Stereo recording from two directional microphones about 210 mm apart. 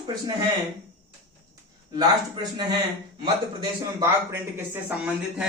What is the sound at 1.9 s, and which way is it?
Speech, 20° right (ahead or behind).